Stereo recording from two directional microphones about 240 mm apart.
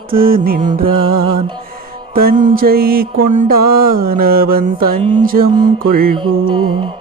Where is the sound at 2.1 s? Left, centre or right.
Right.